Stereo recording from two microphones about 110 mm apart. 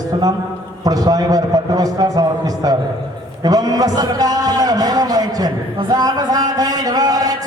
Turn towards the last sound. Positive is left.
turn(degrees=-35)  # may be behind; listen again after turning